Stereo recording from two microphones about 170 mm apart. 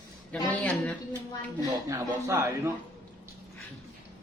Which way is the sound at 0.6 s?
10° left (ahead or behind).